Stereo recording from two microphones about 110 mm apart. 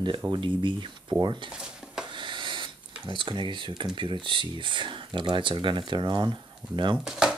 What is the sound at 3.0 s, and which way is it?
Speech, 50° right (ahead or behind).